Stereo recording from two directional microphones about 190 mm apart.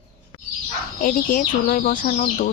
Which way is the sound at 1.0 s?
45° left (ahead or behind).